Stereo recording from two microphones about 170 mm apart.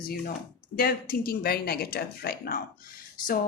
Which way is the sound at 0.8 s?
60° left (ahead or behind).